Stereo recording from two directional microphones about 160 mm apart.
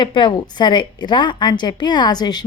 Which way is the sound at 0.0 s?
30° left (ahead or behind).